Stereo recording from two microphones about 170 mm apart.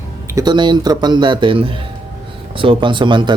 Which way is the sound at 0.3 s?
25° right (ahead or behind).